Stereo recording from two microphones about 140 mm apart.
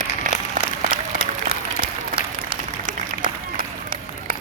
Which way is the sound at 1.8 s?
40° right (ahead or behind).